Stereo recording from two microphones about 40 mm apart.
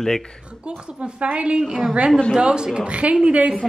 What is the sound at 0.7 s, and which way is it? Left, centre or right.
A woman's voice, right.